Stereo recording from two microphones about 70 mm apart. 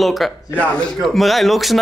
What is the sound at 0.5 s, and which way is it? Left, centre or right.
Speech, centre.